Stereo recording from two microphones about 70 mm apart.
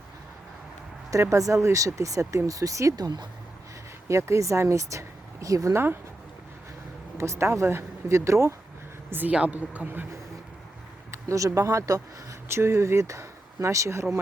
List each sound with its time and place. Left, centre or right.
1.1 s speech: right
2.9 s speech: right
4.1 s speech: right
5.7 s speech: right
7.2 s speech: right
9.0 s speech: right
11.1 s speech: right
12.5 s speech: right